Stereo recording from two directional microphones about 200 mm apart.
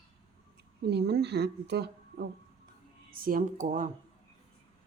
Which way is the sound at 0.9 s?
55° right (ahead or behind).